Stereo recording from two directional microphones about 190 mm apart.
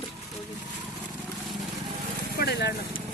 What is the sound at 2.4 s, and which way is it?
Speech, 60° left (ahead or behind).